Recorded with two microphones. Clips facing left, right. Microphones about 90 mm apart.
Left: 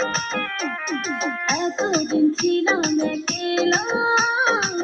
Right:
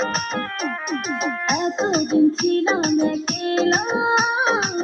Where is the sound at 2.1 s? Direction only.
30° right (ahead or behind).